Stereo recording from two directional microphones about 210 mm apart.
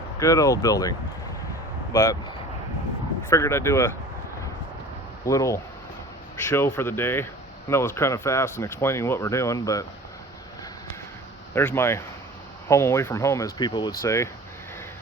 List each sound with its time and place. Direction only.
0.2 s speech: 15° left (ahead or behind)
3.2 s speech: 10° left (ahead or behind)
5.2 s speech: 15° left (ahead or behind)
11.5 s speech: 10° left (ahead or behind)